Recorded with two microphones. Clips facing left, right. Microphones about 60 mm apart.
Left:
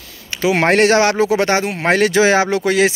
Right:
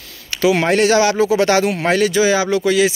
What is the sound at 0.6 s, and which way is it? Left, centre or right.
Speech, left.